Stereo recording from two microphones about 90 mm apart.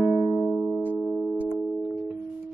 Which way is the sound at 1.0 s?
Centre (ahead or behind).